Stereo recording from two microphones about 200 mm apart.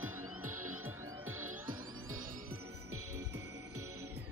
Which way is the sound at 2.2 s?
45° right (ahead or behind).